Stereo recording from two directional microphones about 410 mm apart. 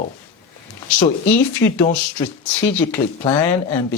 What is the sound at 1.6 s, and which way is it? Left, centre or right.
Speech, centre.